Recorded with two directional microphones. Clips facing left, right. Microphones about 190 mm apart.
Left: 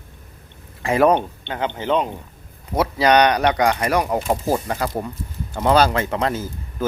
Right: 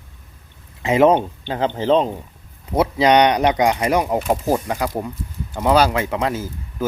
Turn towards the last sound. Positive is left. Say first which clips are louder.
# even
turn(degrees=-10)  # may be behind; listen again after turning